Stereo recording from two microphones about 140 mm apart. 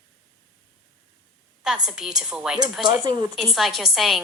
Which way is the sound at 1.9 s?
5° right (ahead or behind).